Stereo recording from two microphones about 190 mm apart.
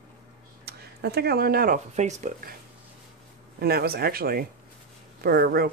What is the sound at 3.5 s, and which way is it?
Speech, 55° right (ahead or behind).